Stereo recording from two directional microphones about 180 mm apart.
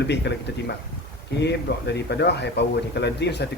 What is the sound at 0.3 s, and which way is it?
Speech, 70° left (ahead or behind).